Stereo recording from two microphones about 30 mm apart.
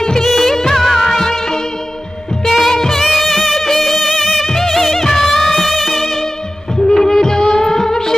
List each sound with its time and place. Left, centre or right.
0.2 s music of bollywood: centre
2.4 s music: centre
2.7 s music: centre
3.0 s music: centre
3.5 s music: centre
4.0 s music: centre
4.5 s music: centre
5.6 s music: centre
6.9 s music of bollywood: centre